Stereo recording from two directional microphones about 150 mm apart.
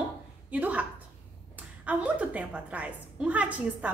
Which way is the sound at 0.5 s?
10° right (ahead or behind).